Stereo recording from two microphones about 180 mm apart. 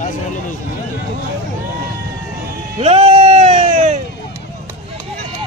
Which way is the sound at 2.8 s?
30° right (ahead or behind).